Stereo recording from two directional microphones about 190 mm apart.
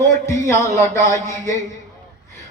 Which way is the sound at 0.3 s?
15° left (ahead or behind).